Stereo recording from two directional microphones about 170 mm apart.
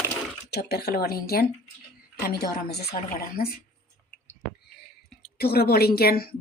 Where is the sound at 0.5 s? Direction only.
70° left (ahead or behind).